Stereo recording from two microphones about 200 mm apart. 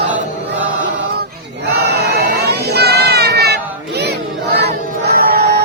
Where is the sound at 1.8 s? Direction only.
55° right (ahead or behind).